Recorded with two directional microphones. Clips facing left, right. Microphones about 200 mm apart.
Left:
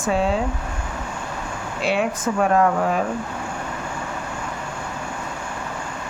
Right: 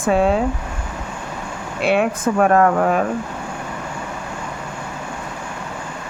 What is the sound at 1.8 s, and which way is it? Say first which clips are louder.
Speech: right 4 dB; 55° right (ahead or behind).